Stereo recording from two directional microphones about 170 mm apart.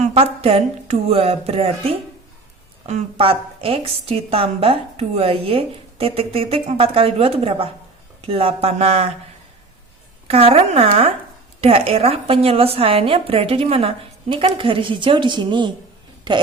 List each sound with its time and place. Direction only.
0.0 s a woman's voice: 35° right (ahead or behind)
10.2 s a woman's voice: 35° right (ahead or behind)